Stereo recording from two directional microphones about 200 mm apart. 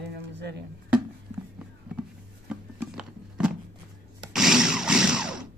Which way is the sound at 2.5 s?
5° right (ahead or behind).